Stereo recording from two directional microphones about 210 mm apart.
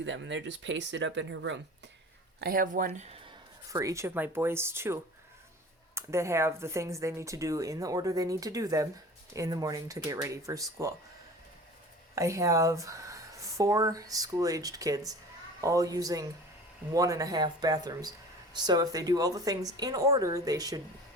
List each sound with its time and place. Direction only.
0.0 s speech: 60° right (ahead or behind)
2.4 s speech: 45° right (ahead or behind)
3.7 s speech: 15° right (ahead or behind)
12.1 s speech: 15° right (ahead or behind)